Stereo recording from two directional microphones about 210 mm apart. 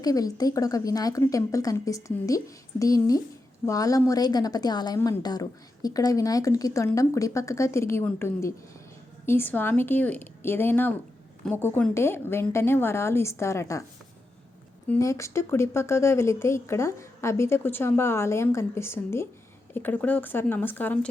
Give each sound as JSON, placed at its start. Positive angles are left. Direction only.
{"t": 0.0, "sound": "a woman's voice", "side_deg": 15}
{"t": 14.8, "sound": "a woman's voice", "side_deg": 15}